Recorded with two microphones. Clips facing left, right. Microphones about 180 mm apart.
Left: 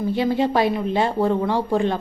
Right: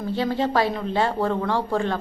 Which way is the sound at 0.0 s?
15° left (ahead or behind).